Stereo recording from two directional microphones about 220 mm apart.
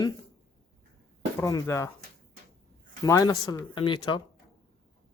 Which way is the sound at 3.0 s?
15° left (ahead or behind).